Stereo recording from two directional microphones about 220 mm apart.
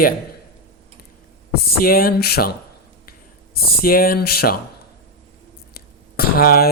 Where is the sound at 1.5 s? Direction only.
45° left (ahead or behind).